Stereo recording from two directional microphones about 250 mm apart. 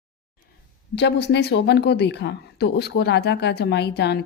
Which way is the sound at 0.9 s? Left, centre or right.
Left.